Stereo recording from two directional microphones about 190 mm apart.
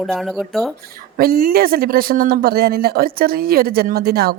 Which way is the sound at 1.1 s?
50° right (ahead or behind).